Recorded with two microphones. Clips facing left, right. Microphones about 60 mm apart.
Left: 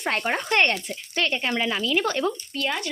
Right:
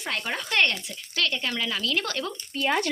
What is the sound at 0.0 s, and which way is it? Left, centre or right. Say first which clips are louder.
Speech: left 5 dB; left.